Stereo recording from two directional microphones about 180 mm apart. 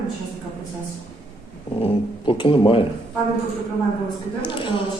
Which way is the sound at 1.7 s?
30° left (ahead or behind).